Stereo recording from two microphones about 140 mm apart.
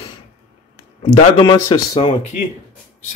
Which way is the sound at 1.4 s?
35° left (ahead or behind).